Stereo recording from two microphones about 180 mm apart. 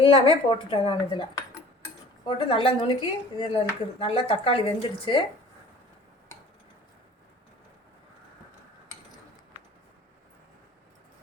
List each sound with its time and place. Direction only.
0.0 s speech: 30° left (ahead or behind)